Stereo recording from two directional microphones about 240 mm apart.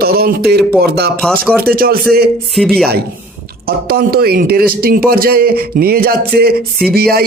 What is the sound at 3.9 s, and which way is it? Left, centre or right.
A man's voice, right.